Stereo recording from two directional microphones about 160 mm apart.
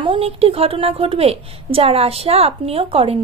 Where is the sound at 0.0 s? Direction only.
35° right (ahead or behind).